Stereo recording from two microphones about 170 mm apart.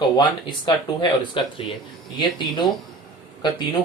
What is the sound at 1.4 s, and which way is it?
Speech, 30° left (ahead or behind).